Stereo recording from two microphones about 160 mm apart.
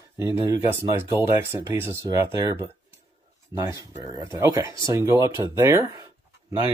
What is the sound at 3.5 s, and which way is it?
Speech, 20° right (ahead or behind).